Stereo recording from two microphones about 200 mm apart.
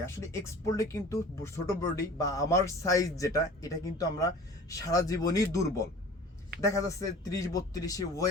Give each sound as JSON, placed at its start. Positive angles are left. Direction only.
{"t": 0.0, "sound": "speech", "side_deg": 15}